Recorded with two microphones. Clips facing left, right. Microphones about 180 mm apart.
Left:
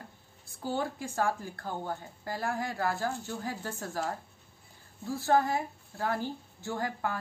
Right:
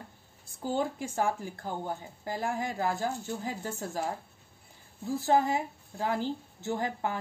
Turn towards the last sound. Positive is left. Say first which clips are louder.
# right 2 dB
turn(degrees=-20)  # may be behind; listen again after turning